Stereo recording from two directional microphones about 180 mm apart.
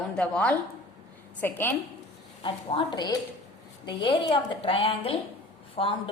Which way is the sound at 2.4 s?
30° left (ahead or behind).